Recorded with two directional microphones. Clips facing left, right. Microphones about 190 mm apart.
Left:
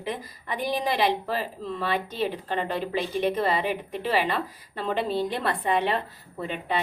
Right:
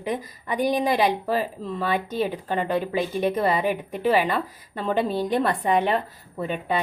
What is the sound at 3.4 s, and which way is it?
A woman's voice, 45° right (ahead or behind).